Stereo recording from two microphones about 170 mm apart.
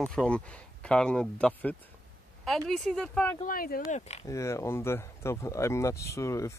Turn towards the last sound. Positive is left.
turn(degrees=15)  # may be behind; listen again after turning